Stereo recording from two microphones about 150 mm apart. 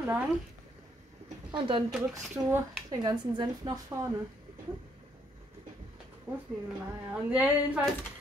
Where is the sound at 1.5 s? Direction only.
35° right (ahead or behind).